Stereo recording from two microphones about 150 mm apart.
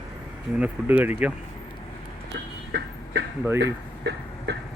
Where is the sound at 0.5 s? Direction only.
10° right (ahead or behind).